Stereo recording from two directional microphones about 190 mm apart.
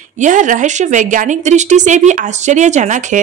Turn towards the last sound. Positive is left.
turn(degrees=-40)  # may be behind; listen again after turning